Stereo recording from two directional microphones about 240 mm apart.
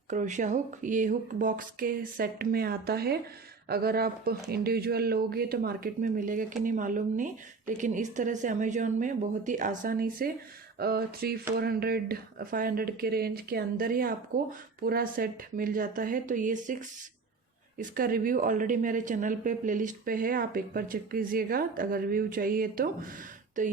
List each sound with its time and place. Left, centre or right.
0.1 s a woman's voice: right
17.7 s a woman's voice: right